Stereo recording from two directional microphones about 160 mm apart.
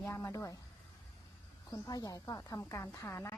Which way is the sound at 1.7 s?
20° left (ahead or behind).